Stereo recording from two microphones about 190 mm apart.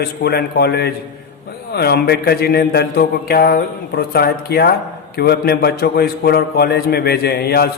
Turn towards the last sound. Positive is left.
turn(degrees=55)  # may be behind; listen again after turning